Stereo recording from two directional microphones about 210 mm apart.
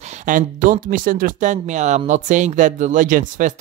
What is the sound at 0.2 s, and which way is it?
Speech, 35° right (ahead or behind).